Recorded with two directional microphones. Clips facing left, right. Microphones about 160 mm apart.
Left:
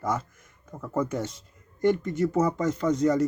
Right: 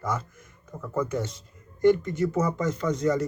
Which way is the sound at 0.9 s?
40° left (ahead or behind).